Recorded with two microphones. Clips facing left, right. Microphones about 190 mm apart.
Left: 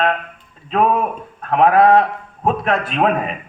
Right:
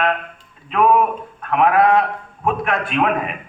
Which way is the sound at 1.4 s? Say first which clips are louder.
Left 3 dB; 35° left (ahead or behind).